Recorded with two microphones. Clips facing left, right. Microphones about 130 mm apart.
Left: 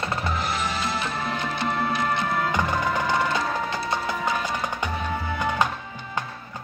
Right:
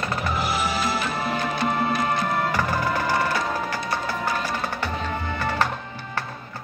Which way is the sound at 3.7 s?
20° left (ahead or behind).